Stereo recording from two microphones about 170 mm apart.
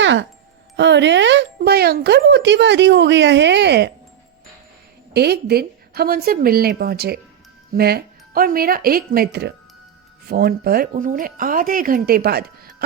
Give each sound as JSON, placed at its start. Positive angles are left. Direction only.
{"t": 0.0, "sound": "music", "side_deg": -90}
{"t": 0.8, "sound": "speech", "side_deg": -90}
{"t": 5.1, "sound": "speech", "side_deg": -70}